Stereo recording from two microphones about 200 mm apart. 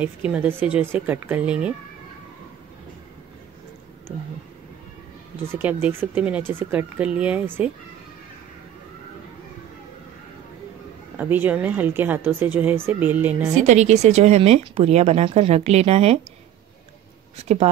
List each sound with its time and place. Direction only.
0.0 s a woman's voice: 5° right (ahead or behind)
5.5 s a woman's voice: 10° right (ahead or behind)
11.1 s a woman's voice: 10° right (ahead or behind)
13.6 s speech: 35° right (ahead or behind)
17.4 s speech: 30° right (ahead or behind)